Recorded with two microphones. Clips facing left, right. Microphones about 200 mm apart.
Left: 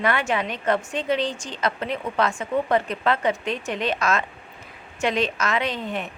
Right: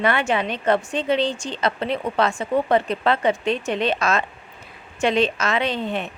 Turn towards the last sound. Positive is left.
turn(degrees=-30)  # may be behind; listen again after turning